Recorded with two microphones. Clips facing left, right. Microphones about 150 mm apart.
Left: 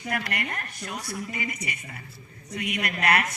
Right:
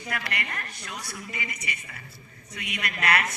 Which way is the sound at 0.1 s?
50° left (ahead or behind).